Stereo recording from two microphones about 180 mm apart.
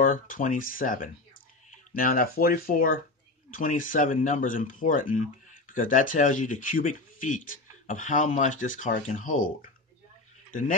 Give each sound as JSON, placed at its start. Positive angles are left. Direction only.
{"t": 0.0, "sound": "speech", "side_deg": 50}